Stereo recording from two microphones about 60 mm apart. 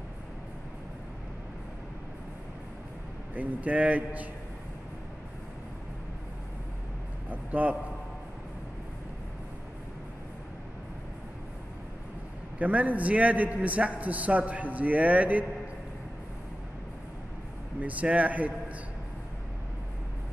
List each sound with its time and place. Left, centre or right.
3.3 s a man's voice: right
7.2 s vehicle: right
12.5 s a man's voice: right
17.7 s a man's voice: right